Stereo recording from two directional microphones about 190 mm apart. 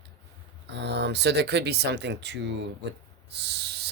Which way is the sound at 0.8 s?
65° right (ahead or behind).